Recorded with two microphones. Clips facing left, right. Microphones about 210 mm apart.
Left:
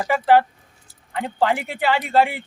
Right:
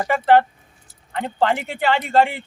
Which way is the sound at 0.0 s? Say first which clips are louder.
Right 1 dB; 5° left (ahead or behind).